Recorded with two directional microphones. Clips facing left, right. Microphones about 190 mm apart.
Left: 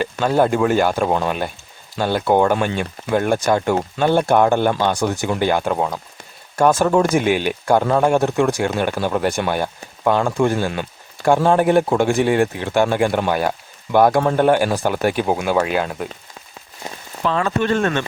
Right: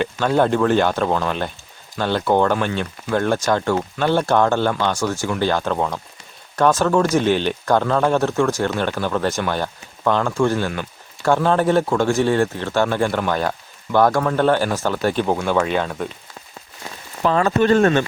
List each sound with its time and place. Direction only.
0.0 s speech: 5° left (ahead or behind)
17.2 s speech: 40° right (ahead or behind)